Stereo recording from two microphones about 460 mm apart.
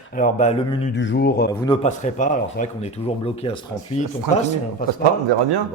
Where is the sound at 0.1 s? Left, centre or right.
Centre.